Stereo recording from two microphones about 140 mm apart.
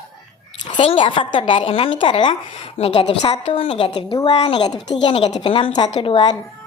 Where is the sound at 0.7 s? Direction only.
35° left (ahead or behind).